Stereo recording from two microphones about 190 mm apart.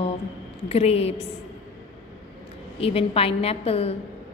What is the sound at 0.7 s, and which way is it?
Speech, 35° left (ahead or behind).